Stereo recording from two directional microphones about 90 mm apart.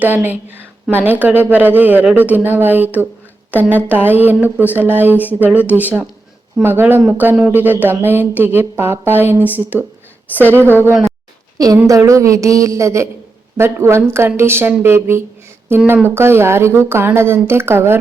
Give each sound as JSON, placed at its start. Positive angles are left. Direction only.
{"t": 0.0, "sound": "a woman's voice", "side_deg": -20}
{"t": 11.5, "sound": "a woman's voice", "side_deg": -40}